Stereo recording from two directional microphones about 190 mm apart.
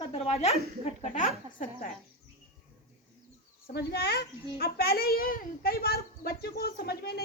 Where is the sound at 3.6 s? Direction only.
60° left (ahead or behind).